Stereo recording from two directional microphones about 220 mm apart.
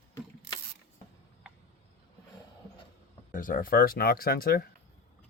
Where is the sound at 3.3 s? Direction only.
40° left (ahead or behind).